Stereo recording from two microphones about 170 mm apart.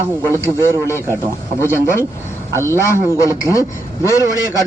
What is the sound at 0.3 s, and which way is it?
Speech, 15° left (ahead or behind).